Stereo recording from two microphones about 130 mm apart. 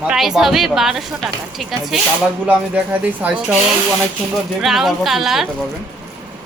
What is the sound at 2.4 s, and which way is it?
Speech, 10° right (ahead or behind).